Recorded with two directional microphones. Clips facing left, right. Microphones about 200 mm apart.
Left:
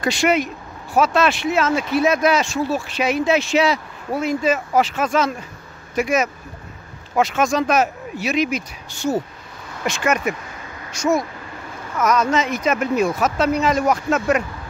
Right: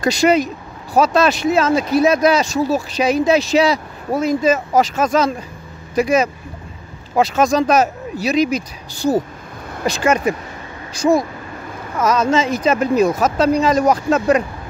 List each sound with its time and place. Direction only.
0.0 s speech: 40° right (ahead or behind)